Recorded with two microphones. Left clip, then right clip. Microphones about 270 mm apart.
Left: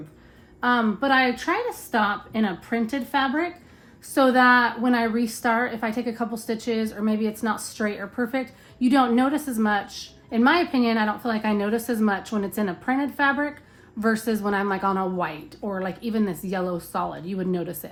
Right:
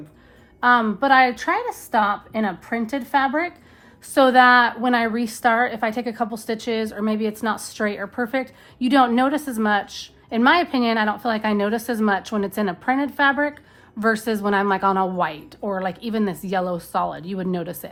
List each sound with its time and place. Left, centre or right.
0.6 s a woman's voice: centre